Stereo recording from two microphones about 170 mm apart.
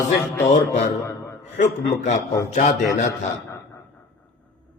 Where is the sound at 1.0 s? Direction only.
15° left (ahead or behind).